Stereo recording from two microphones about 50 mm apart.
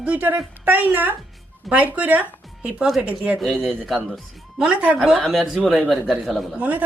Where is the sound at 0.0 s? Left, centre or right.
Right.